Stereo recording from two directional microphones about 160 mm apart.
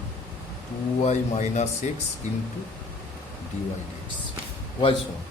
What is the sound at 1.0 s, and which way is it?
Speech, 45° left (ahead or behind).